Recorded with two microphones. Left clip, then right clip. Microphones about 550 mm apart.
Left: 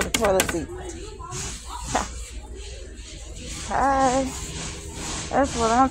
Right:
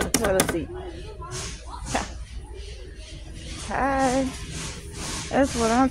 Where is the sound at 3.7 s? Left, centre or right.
Right.